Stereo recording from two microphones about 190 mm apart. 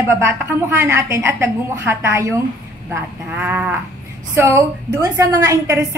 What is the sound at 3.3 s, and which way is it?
A woman's voice, 10° right (ahead or behind).